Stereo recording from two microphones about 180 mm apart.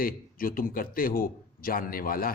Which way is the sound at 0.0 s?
50° left (ahead or behind).